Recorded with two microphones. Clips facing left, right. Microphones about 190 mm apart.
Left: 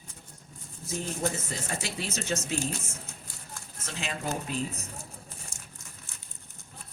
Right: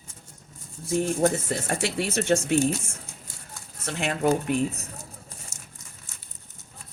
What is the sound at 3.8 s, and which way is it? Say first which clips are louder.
Speech: right 10 dB; 65° right (ahead or behind).